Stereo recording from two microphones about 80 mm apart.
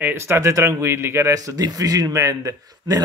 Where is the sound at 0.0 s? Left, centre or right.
Right.